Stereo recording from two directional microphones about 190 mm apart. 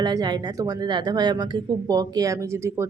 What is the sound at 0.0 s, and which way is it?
Speech, 20° right (ahead or behind).